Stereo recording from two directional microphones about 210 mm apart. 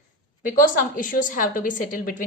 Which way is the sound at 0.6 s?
40° left (ahead or behind).